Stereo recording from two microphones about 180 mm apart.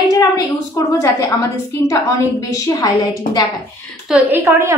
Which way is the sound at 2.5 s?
20° left (ahead or behind).